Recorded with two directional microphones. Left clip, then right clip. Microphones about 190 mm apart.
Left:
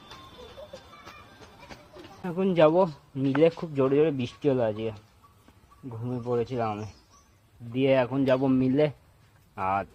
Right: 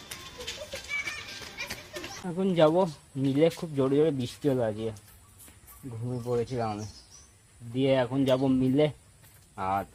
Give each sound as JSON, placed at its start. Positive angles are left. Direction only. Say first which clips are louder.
{"t": 2.2, "sound": "speech", "louder": "left 2 dB", "side_deg": 5}
{"t": 6.1, "sound": "speech", "louder": "left 2 dB", "side_deg": 10}